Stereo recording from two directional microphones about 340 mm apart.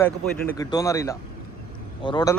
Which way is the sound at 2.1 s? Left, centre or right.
Centre.